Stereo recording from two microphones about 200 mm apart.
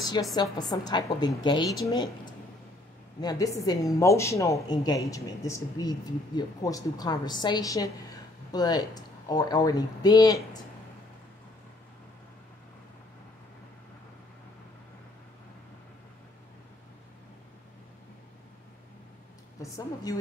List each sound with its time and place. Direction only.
0.0 s speech: 20° left (ahead or behind)
19.6 s a woman's voice: 20° left (ahead or behind)